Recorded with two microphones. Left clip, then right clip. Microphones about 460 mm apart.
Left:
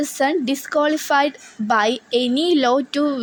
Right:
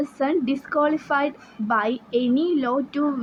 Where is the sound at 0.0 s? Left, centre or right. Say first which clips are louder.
Left 4 dB; right.